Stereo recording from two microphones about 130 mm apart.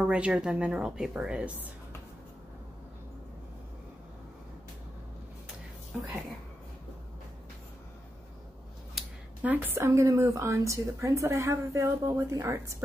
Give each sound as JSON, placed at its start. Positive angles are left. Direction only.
{"t": 0.0, "sound": "a woman's voice", "side_deg": -10}
{"t": 8.9, "sound": "speech", "side_deg": -10}